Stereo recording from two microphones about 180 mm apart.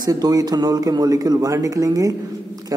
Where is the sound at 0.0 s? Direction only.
20° right (ahead or behind).